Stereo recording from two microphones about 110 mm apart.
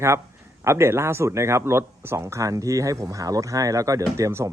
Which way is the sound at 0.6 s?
25° right (ahead or behind).